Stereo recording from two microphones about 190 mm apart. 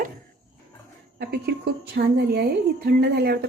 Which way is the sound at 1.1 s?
60° right (ahead or behind).